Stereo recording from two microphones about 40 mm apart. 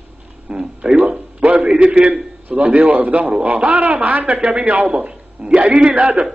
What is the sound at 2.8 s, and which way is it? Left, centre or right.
A man's voice, right.